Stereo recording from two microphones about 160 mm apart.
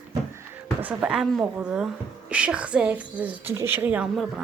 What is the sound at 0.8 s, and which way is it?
A woman's voice, 10° right (ahead or behind).